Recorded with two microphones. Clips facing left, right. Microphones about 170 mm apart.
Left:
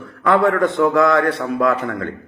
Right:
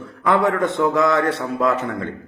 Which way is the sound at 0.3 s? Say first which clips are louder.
Left 3 dB; 20° right (ahead or behind).